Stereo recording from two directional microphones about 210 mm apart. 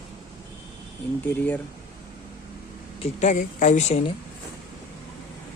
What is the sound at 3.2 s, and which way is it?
Speech, 35° left (ahead or behind).